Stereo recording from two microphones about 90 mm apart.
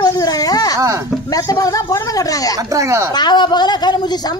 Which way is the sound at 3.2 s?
55° left (ahead or behind).